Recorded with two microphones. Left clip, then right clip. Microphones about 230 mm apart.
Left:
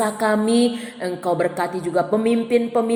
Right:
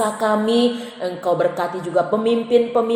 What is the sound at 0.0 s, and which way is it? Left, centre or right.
A woman's voice, left.